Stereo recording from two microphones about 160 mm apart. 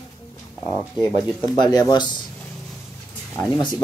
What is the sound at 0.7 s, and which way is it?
Speech, 15° right (ahead or behind).